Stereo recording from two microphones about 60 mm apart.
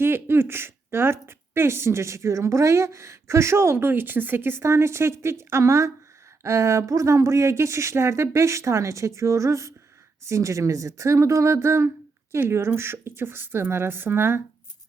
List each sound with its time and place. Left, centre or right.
0.0 s speech: right